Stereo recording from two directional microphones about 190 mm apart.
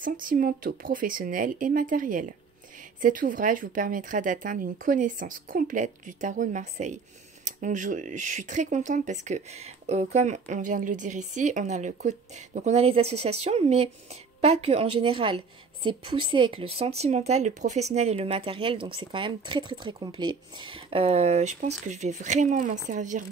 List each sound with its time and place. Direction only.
0.0 s speech: 45° right (ahead or behind)